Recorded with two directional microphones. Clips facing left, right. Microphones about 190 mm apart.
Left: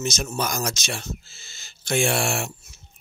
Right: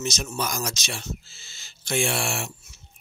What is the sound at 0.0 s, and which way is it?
Speech, 45° left (ahead or behind).